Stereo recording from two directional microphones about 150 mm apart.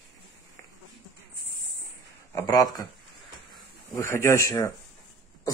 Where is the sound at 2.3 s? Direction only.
20° left (ahead or behind).